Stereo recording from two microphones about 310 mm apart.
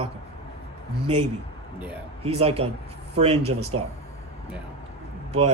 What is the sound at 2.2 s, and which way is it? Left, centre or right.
Speech, centre.